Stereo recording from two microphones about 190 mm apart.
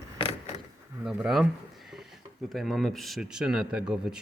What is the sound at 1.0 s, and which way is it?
Speech, centre (ahead or behind).